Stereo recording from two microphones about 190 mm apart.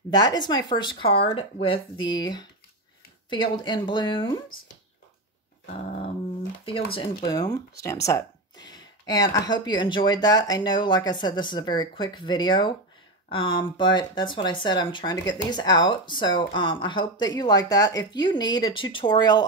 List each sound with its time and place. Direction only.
0.1 s speech: 20° left (ahead or behind)
6.6 s speech: 30° left (ahead or behind)